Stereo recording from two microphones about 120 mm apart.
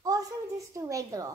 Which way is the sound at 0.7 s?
30° right (ahead or behind).